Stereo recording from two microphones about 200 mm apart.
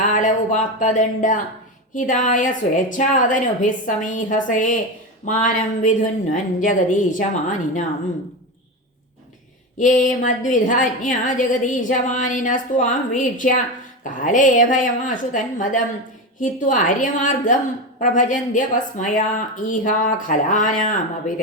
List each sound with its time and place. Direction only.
0.1 s a woman's voice: 40° left (ahead or behind)
9.7 s a woman's voice: 40° left (ahead or behind)